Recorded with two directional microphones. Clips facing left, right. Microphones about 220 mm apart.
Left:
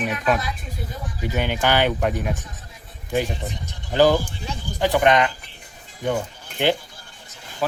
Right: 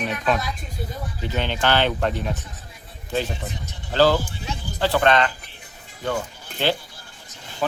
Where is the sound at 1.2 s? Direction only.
10° left (ahead or behind).